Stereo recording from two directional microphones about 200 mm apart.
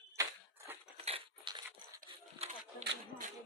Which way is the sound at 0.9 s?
30° right (ahead or behind).